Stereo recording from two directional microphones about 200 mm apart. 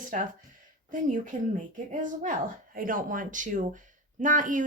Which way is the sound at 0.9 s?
40° right (ahead or behind).